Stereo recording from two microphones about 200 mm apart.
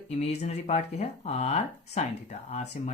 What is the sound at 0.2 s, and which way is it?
Speech, 35° left (ahead or behind).